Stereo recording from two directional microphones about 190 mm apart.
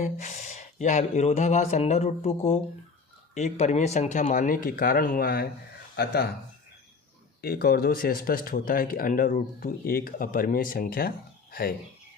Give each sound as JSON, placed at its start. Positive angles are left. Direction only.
{"t": 0.0, "sound": "speech", "side_deg": 40}
{"t": 7.4, "sound": "speech", "side_deg": 55}